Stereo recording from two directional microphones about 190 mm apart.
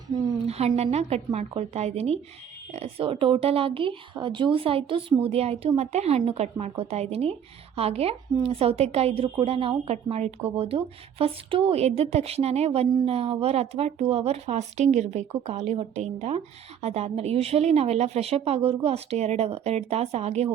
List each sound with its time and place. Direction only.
0.4 s a woman's voice: 35° right (ahead or behind)